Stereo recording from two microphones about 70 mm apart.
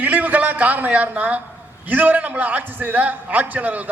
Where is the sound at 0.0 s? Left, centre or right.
Right.